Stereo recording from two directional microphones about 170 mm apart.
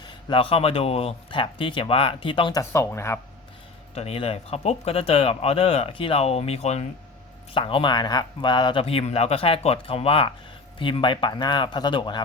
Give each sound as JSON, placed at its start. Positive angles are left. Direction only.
{"t": 0.0, "sound": "speech", "side_deg": 25}
{"t": 2.6, "sound": "speech", "side_deg": 15}
{"t": 3.9, "sound": "speech", "side_deg": 35}